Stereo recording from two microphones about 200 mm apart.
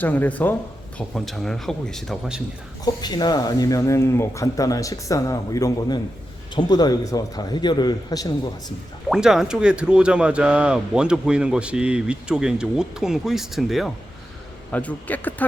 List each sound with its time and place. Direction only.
0.0 s speech: 10° left (ahead or behind)
2.8 s a man's voice: 20° left (ahead or behind)
9.0 s speech: centre (ahead or behind)